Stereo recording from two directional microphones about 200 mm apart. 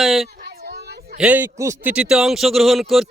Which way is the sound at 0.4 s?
55° right (ahead or behind).